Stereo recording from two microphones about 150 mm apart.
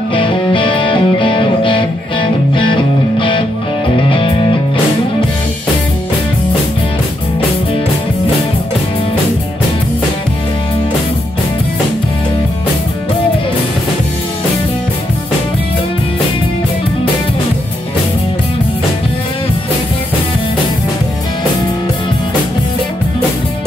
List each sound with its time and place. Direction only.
0.1 s music: 35° left (ahead or behind)